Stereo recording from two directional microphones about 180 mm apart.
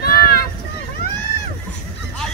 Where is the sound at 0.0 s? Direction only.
60° left (ahead or behind).